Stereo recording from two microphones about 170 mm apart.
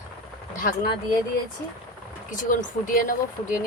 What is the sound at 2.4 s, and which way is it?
Speech, 55° left (ahead or behind).